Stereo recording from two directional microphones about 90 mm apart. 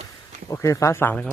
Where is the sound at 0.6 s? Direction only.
35° left (ahead or behind).